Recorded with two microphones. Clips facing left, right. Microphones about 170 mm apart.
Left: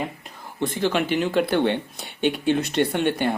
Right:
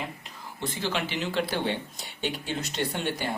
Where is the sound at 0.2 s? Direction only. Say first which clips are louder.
Left 8 dB; 55° left (ahead or behind).